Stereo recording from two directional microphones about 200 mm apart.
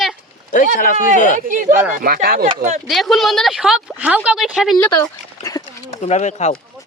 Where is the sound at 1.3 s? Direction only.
40° right (ahead or behind).